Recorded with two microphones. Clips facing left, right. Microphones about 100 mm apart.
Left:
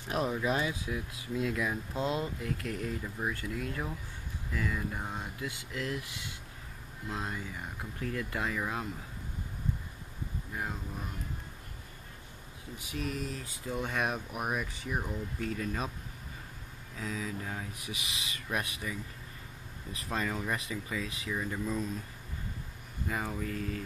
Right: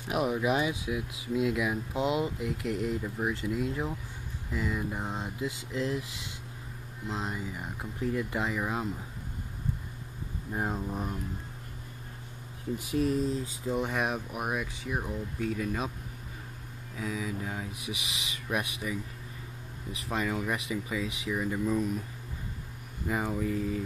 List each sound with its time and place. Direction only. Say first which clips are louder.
0.1 s speech: right 3 dB; 10° right (ahead or behind)
10.5 s a sound: right 7 dB; 40° right (ahead or behind)
12.7 s a sound: right 9 dB; 40° right (ahead or behind)
13.4 s speech: right 5 dB; 20° right (ahead or behind); by 15.9 s 5° right (ahead or behind)
16.9 s speech: right 3 dB; 10° right (ahead or behind)
23.0 s speech: right 5 dB; 15° right (ahead or behind)